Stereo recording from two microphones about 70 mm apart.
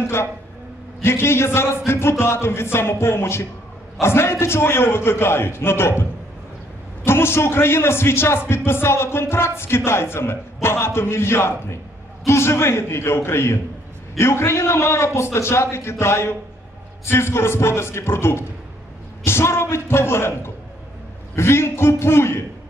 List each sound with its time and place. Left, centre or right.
0.0 s music: left
7.1 s music: left